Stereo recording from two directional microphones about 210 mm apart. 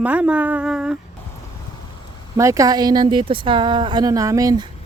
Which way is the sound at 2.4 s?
15° right (ahead or behind).